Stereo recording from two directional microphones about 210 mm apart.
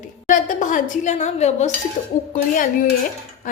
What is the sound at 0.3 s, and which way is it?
Speech, 40° left (ahead or behind).